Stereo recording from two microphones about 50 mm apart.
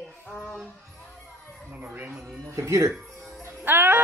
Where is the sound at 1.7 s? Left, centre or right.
Right.